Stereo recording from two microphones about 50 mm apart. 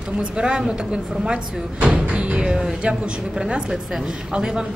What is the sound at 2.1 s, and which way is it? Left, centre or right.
Speech, right.